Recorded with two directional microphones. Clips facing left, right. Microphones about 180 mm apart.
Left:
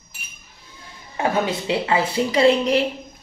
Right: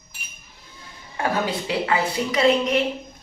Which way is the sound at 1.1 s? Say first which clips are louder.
Left 2 dB; 20° left (ahead or behind).